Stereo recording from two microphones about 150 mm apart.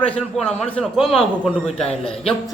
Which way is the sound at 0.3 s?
5° left (ahead or behind).